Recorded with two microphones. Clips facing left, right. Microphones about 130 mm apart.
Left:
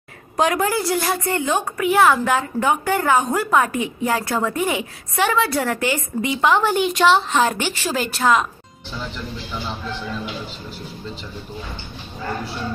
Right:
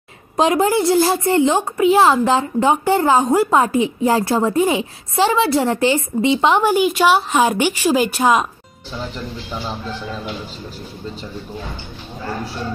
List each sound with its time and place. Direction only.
0.4 s a woman's voice: 25° right (ahead or behind)
6.7 s a woman's voice: 5° right (ahead or behind)